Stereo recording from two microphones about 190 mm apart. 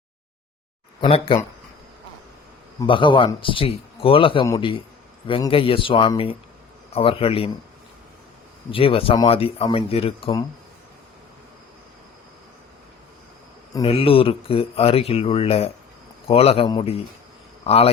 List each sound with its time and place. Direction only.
1.0 s speech: 25° left (ahead or behind)
2.8 s speech: 25° left (ahead or behind)
8.7 s speech: 30° left (ahead or behind)
13.8 s a man's voice: 30° left (ahead or behind)